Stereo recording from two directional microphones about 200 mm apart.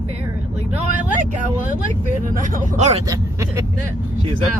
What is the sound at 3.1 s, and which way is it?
Speech, 15° right (ahead or behind).